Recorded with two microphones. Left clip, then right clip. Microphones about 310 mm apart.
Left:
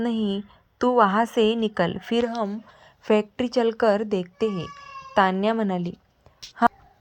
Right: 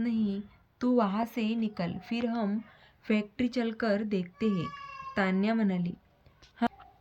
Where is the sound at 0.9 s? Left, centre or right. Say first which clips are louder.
Left 11 dB; left.